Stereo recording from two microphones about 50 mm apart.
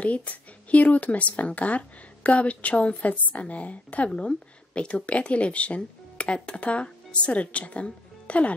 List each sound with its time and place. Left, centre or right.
0.0 s speech: left